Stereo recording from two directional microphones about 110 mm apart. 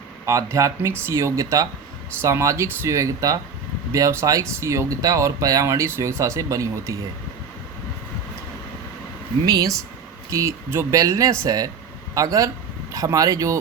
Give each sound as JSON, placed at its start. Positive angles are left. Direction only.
{"t": 0.3, "sound": "speech", "side_deg": -30}
{"t": 9.5, "sound": "speech", "side_deg": -35}